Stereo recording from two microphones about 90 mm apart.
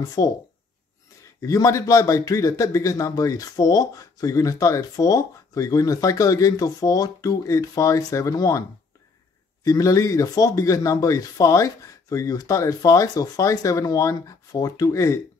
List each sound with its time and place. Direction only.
0.2 s speech: 35° left (ahead or behind)
1.4 s speech: 35° left (ahead or behind)
9.7 s speech: 40° left (ahead or behind)